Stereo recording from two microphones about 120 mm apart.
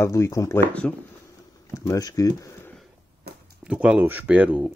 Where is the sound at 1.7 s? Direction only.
25° left (ahead or behind).